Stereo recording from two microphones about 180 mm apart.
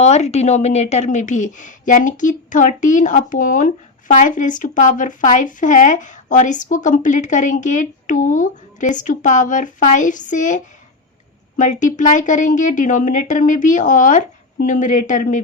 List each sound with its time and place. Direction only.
0.0 s speech: 40° left (ahead or behind)